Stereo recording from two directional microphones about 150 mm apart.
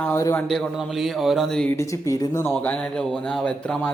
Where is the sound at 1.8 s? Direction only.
20° left (ahead or behind).